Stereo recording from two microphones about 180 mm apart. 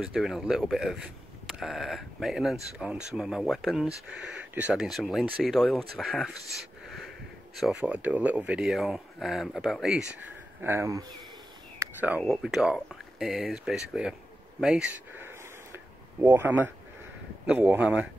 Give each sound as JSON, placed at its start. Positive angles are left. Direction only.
{"t": 0.0, "sound": "speech", "side_deg": 0}
{"t": 10.6, "sound": "speech", "side_deg": -15}
{"t": 11.8, "sound": "a sound", "side_deg": -10}
{"t": 12.2, "sound": "speech", "side_deg": 0}
{"t": 16.2, "sound": "speech", "side_deg": -10}